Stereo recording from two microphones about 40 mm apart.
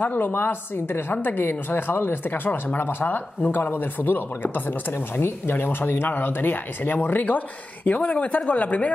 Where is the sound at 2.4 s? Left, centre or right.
Left.